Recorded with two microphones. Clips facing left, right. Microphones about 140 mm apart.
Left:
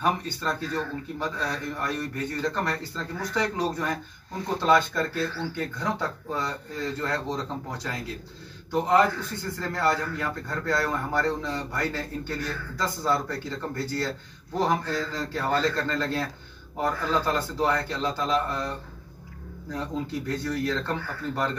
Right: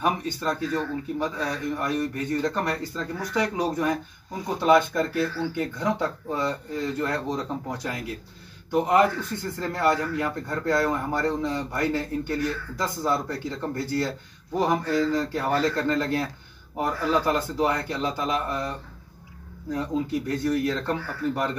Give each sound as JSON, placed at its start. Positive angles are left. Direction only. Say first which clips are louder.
{"t": 0.0, "sound": "a man's voice", "louder": "right 1 dB", "side_deg": -15}
{"t": 8.7, "sound": "a man's voice", "louder": "right 1 dB", "side_deg": -15}